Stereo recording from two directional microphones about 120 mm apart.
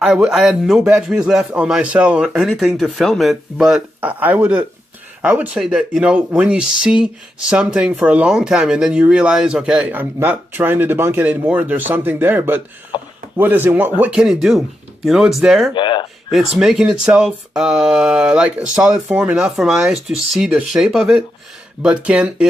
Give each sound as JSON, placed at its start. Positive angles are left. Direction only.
{"t": 0.0, "sound": "a man's voice", "side_deg": -5}
{"t": 12.9, "sound": "a sound", "side_deg": 40}
{"t": 13.3, "sound": "a man's voice", "side_deg": -15}
{"t": 15.7, "sound": "speech", "side_deg": 40}
{"t": 16.3, "sound": "a man's voice", "side_deg": -5}